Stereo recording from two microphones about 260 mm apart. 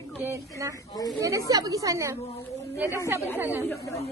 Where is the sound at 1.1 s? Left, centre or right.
Centre.